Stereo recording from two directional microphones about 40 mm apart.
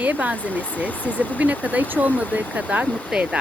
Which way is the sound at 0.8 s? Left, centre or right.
Left.